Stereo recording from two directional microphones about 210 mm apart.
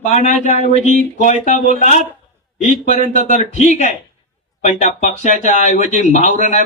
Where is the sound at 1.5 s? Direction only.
40° right (ahead or behind).